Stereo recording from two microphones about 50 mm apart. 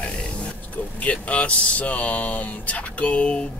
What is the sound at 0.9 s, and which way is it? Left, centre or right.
Speech, left.